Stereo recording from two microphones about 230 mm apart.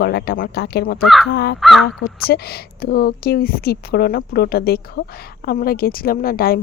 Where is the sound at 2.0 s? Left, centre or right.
Left.